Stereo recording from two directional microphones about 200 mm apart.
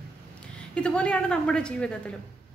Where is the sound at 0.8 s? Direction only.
5° left (ahead or behind).